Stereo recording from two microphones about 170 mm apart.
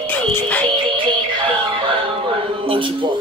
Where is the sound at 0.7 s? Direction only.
30° right (ahead or behind).